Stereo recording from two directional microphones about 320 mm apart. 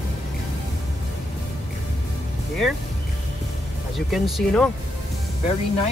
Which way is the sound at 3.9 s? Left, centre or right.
Centre.